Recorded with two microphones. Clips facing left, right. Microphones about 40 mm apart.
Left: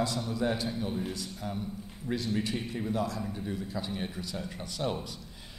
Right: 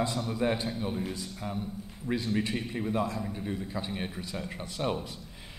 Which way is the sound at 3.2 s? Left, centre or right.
Centre.